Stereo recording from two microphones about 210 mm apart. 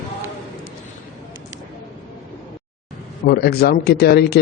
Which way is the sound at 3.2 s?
50° left (ahead or behind).